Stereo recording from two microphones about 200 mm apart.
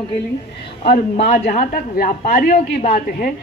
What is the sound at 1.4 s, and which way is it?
A woman's voice, 45° left (ahead or behind).